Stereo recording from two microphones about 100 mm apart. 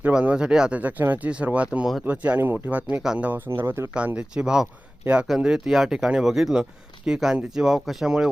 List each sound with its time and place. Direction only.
0.0 s speech: 10° right (ahead or behind)
3.0 s speech: 5° right (ahead or behind)
3.2 s speech: 20° right (ahead or behind)
3.9 s speech: 10° right (ahead or behind)